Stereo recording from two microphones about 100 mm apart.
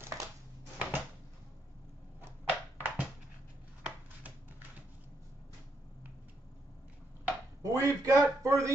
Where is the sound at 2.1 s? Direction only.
20° right (ahead or behind).